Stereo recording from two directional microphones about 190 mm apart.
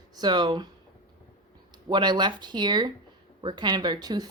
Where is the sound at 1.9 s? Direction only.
25° right (ahead or behind).